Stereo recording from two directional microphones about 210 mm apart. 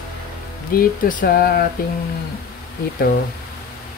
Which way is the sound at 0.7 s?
40° left (ahead or behind).